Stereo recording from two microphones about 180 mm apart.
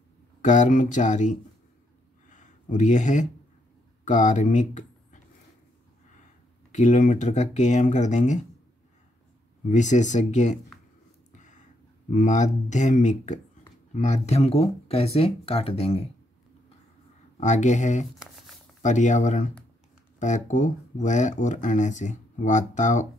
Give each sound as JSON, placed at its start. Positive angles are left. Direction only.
{"t": 0.4, "sound": "speech", "side_deg": 45}
{"t": 2.2, "sound": "a sound", "side_deg": 45}
{"t": 4.0, "sound": "speech", "side_deg": 45}
{"t": 6.7, "sound": "speech", "side_deg": 40}
{"t": 9.7, "sound": "speech", "side_deg": 40}
{"t": 11.3, "sound": "a sound", "side_deg": 45}
{"t": 12.1, "sound": "speech", "side_deg": 45}
{"t": 17.4, "sound": "speech", "side_deg": 40}